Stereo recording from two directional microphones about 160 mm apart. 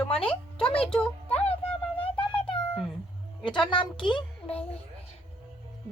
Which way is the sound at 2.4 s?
35° left (ahead or behind).